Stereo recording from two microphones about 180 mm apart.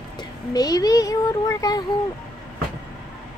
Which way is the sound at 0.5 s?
20° left (ahead or behind).